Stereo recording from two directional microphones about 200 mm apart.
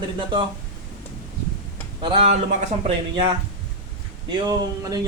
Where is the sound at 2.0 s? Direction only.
25° right (ahead or behind).